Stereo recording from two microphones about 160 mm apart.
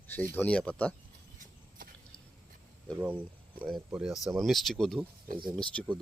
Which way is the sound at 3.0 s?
10° right (ahead or behind).